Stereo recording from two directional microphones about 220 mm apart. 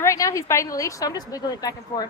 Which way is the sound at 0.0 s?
15° left (ahead or behind).